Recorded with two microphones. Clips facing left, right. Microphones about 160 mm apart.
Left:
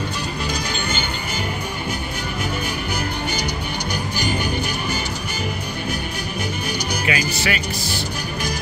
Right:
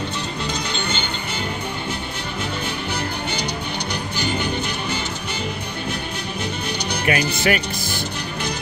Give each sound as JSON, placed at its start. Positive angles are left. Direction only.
{"t": 7.1, "sound": "speech", "side_deg": -50}